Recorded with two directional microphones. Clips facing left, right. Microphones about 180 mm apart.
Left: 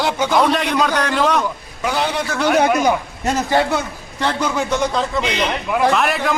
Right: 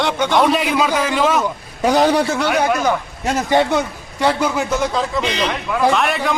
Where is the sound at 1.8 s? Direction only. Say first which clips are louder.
Right 7 dB; 40° right (ahead or behind).